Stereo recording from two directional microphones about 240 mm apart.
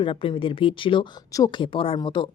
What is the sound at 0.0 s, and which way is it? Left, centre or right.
Speech, left.